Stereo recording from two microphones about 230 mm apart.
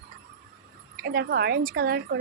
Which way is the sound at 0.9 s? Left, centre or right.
Right.